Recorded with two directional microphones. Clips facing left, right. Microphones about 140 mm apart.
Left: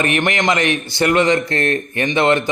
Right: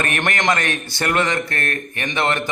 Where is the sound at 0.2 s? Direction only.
10° left (ahead or behind).